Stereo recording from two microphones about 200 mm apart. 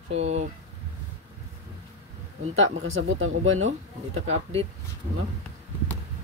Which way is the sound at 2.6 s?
80° right.